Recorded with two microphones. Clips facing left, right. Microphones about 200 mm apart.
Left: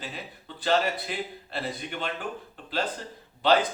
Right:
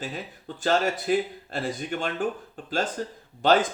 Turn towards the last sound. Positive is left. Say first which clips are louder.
# right 2 dB
turn(degrees=-45)  # may be behind; listen again after turning